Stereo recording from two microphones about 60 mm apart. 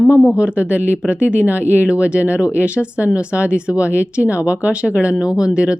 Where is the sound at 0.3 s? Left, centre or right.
Right.